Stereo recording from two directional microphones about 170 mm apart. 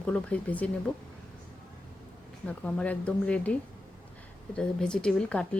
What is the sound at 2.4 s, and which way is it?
Speech, 5° left (ahead or behind).